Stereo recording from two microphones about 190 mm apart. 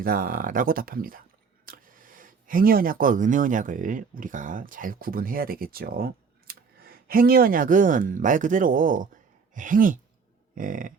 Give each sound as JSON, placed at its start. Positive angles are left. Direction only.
{"t": 0.0, "sound": "speech", "side_deg": -50}